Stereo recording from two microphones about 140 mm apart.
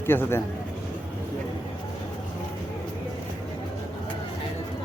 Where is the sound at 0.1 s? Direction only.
15° left (ahead or behind).